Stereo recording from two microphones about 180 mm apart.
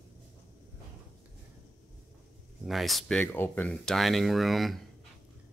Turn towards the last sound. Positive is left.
turn(degrees=0)  # may be behind; listen again after turning